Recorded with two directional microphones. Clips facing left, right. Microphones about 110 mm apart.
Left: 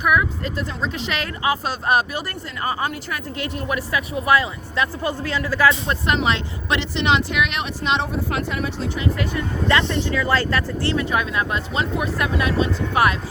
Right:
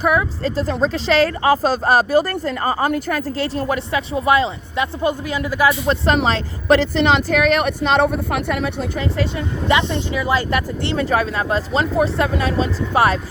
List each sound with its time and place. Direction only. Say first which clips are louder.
0.0 s speech: right 2 dB; 30° right (ahead or behind); by 6.0 s 15° right (ahead or behind)
6.1 s speech: right 1 dB; 35° right (ahead or behind)
7.9 s a woman's voice: right 4 dB; 55° right (ahead or behind)
9.0 s speech: right 1 dB; 25° right (ahead or behind)
11.0 s speech: right 3 dB; 35° right (ahead or behind)